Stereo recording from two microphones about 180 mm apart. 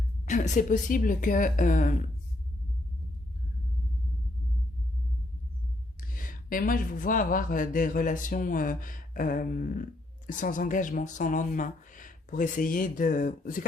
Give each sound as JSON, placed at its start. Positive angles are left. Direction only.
{"t": 0.3, "sound": "speech", "side_deg": 40}
{"t": 6.1, "sound": "speech", "side_deg": 50}